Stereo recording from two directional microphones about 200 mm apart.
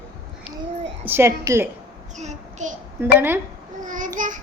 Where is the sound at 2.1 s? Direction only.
35° right (ahead or behind).